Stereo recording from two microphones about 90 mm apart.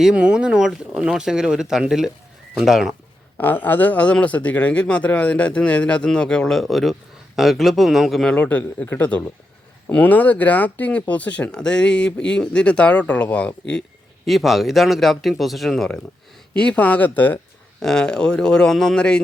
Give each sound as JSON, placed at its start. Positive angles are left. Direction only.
{"t": 0.0, "sound": "a man's voice", "side_deg": -10}
{"t": 3.3, "sound": "a man's voice", "side_deg": 20}
{"t": 14.3, "sound": "a man's voice", "side_deg": 0}
{"t": 16.6, "sound": "speech", "side_deg": 15}
{"t": 17.8, "sound": "speech", "side_deg": 10}